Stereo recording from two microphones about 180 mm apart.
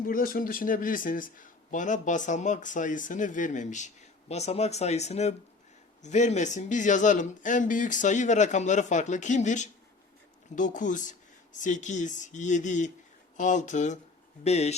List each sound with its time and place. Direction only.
0.0 s a man's voice: 55° left (ahead or behind); by 14.8 s 35° left (ahead or behind)